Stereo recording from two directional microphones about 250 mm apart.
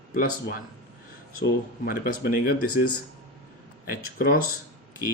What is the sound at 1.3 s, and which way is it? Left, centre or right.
Speech, left.